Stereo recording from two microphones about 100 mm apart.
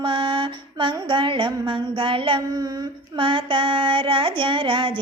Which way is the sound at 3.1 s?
55° right (ahead or behind).